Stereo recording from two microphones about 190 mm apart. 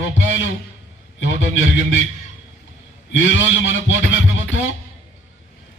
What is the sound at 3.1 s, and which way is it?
A man's voice, 90° left.